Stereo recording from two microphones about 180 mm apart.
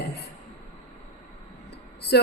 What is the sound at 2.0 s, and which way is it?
Speech, 65° left (ahead or behind).